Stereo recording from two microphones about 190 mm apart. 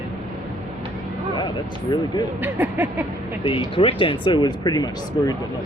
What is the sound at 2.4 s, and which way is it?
Speech, 10° right (ahead or behind).